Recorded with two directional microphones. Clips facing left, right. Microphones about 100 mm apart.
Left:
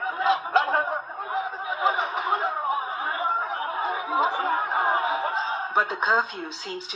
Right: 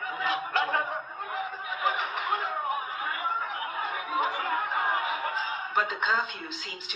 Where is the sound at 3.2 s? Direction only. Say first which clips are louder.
Left 6 dB; 30° left (ahead or behind).